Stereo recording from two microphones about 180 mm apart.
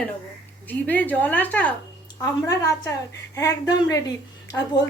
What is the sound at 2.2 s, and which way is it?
A woman's voice, 20° left (ahead or behind).